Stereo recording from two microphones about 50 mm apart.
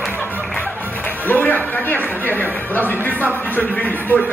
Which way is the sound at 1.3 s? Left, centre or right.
Left.